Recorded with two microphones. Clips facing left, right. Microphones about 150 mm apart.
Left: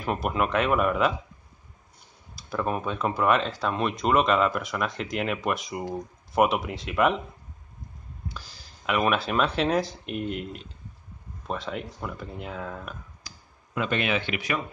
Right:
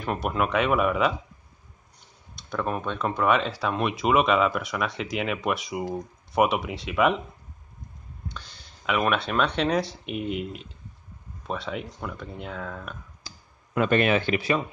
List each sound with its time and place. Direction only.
0.0 s speech: centre (ahead or behind)
2.3 s speech: 5° left (ahead or behind)
8.3 s speech: 5° left (ahead or behind)
13.2 s clicking: 30° right (ahead or behind)
13.7 s speech: 50° right (ahead or behind)